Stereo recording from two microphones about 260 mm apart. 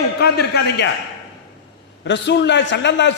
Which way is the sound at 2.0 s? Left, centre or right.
Left.